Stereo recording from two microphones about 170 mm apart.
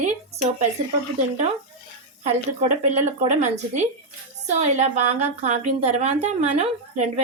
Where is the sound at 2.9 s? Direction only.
45° right (ahead or behind).